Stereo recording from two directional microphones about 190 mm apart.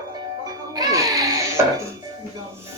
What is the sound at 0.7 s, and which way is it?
Music, 20° right (ahead or behind).